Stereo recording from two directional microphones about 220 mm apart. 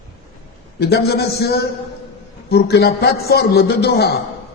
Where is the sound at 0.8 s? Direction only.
45° left (ahead or behind).